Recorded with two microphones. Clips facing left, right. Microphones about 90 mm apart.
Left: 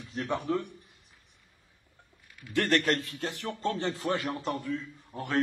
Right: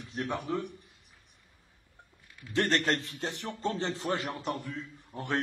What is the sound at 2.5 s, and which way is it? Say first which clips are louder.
A man's voice: left 1 dB; 20° right (ahead or behind).